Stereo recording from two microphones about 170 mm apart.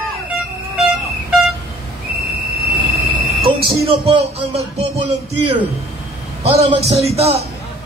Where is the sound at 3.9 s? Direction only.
35° right (ahead or behind).